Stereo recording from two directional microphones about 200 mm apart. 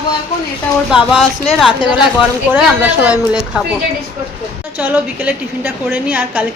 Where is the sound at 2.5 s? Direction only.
5° right (ahead or behind).